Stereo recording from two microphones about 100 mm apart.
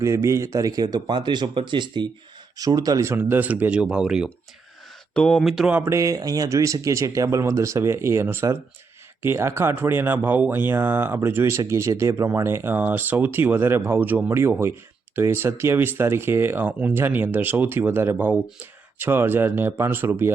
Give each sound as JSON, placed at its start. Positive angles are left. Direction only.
{"t": 0.0, "sound": "speech", "side_deg": -30}
{"t": 2.6, "sound": "speech", "side_deg": -40}
{"t": 3.1, "sound": "speech", "side_deg": -20}
{"t": 5.1, "sound": "speech", "side_deg": 5}
{"t": 5.7, "sound": "speech", "side_deg": -25}